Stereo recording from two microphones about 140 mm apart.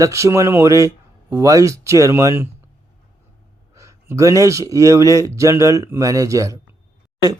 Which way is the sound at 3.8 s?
20° right (ahead or behind).